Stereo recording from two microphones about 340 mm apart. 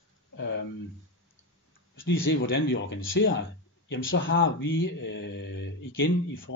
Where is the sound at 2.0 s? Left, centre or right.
Left.